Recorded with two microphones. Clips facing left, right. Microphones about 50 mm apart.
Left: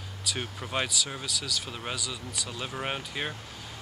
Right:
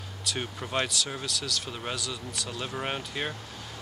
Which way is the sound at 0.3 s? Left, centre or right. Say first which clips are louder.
Right 1 dB; centre.